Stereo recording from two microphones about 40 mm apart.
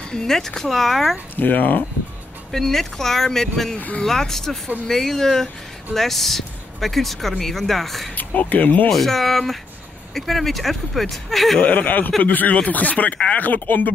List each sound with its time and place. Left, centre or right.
0.1 s speech: centre
1.3 s speech: left
2.5 s speech: centre
3.7 s speech: left
4.0 s speech: centre
8.1 s speech: left
8.9 s speech: centre
11.6 s speech: left